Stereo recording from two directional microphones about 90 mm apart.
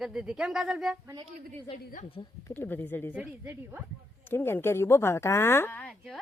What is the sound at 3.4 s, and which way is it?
Speech, 20° right (ahead or behind).